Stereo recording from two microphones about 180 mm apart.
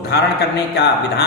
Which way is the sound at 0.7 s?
65° left (ahead or behind).